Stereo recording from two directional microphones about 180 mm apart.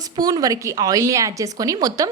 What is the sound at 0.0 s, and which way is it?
A woman's voice, 20° right (ahead or behind).